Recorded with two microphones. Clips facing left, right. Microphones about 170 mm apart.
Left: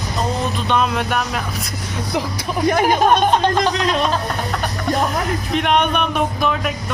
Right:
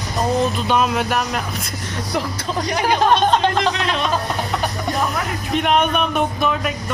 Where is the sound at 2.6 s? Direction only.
50° left (ahead or behind).